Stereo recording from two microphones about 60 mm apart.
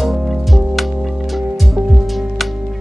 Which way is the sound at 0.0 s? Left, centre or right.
Centre.